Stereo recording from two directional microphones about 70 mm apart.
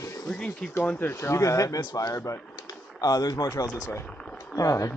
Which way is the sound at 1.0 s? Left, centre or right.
Left.